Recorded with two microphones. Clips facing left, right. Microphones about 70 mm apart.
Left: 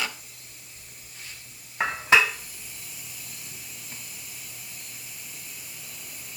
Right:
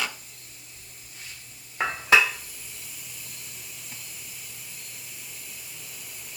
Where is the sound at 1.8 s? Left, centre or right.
Centre.